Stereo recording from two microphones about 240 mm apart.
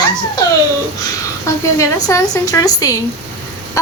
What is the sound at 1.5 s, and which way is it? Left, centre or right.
Speech, centre.